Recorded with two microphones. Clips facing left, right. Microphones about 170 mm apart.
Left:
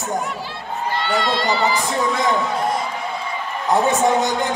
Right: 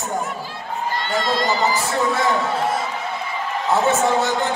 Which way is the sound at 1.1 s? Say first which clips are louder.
Right 1 dB; 40° right (ahead or behind).